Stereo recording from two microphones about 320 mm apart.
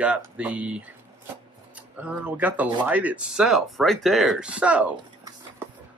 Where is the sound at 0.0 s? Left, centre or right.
Centre.